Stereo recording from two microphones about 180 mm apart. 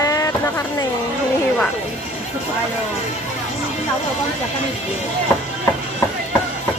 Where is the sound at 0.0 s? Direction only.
20° left (ahead or behind).